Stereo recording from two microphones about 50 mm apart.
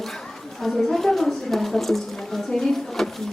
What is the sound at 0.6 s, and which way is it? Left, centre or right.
A woman's voice, centre.